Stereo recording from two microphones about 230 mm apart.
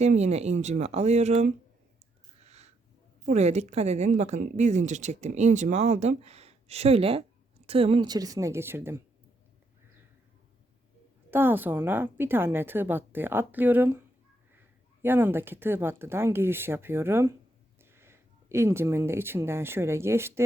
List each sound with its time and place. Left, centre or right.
0.0 s a woman's voice: right
2.4 s a sound: right
3.2 s a woman's voice: right; by 9.0 s centre
11.3 s a woman's voice: centre
15.0 s a woman's voice: centre